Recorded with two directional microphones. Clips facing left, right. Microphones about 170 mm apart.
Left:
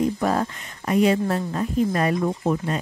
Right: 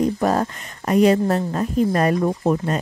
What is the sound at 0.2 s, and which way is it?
A woman's voice, 40° right (ahead or behind).